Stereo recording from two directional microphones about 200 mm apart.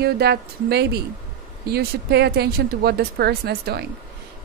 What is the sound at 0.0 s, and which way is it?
Speech, 55° right (ahead or behind).